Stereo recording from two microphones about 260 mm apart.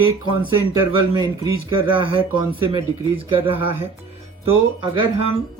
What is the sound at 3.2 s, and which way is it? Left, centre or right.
Speech, centre.